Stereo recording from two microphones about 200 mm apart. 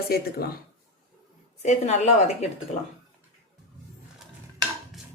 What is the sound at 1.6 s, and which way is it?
Speech, 35° left (ahead or behind).